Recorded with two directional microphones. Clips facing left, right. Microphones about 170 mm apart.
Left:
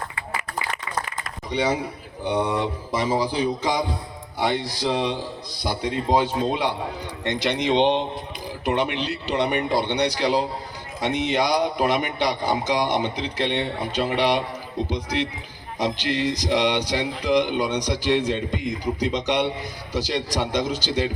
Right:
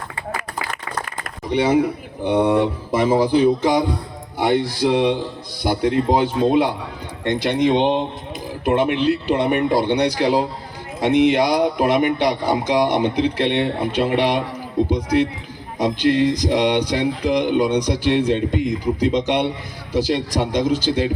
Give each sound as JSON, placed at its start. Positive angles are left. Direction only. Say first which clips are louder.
{"t": 2.5, "sound": "a man's voice", "louder": "right 7 dB", "side_deg": -55}